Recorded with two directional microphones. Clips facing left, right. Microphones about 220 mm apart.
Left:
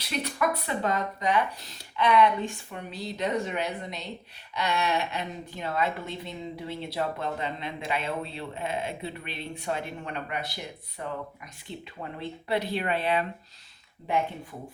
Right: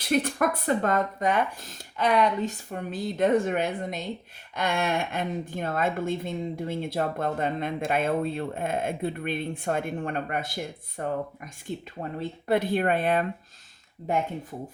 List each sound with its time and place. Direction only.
0.0 s a woman's voice: 50° right (ahead or behind)